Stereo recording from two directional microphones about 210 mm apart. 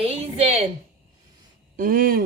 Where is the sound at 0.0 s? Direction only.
30° right (ahead or behind).